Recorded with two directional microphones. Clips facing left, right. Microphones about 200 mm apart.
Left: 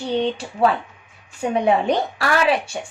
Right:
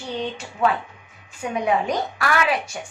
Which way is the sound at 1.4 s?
30° left (ahead or behind).